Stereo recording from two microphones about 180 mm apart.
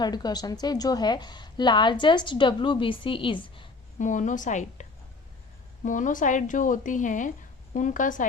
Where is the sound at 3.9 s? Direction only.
45° left (ahead or behind).